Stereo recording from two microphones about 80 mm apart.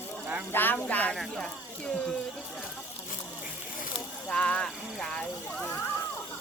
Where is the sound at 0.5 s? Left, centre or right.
Left.